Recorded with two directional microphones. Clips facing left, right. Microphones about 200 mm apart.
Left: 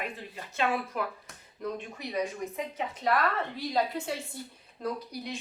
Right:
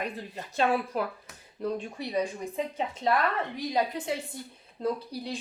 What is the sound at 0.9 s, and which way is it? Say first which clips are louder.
A woman's voice: right 3 dB; 30° right (ahead or behind).